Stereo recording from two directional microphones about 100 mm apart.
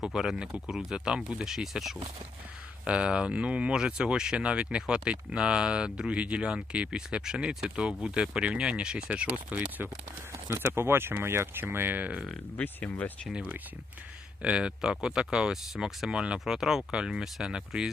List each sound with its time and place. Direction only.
0.0 s speech: 5° right (ahead or behind)
10.3 s speech: 25° right (ahead or behind)
12.5 s speech: 15° left (ahead or behind)
14.4 s speech: 10° right (ahead or behind)